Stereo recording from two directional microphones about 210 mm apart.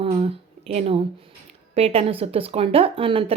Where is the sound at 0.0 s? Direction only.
30° right (ahead or behind).